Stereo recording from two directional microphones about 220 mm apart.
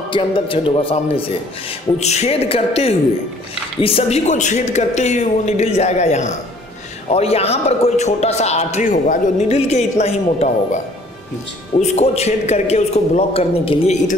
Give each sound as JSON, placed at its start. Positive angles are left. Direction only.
{"t": 0.1, "sound": "a man's voice", "side_deg": 25}
{"t": 11.8, "sound": "a man's voice", "side_deg": 30}